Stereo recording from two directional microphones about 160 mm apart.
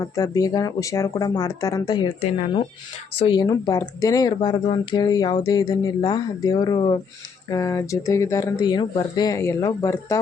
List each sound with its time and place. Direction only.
0.2 s speech: 20° left (ahead or behind)